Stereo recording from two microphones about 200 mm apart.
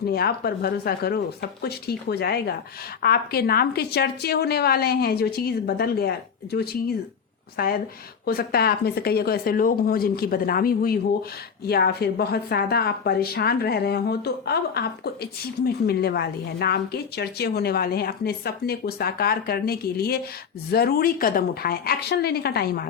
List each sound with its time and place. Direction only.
0.1 s speech: 50° left (ahead or behind)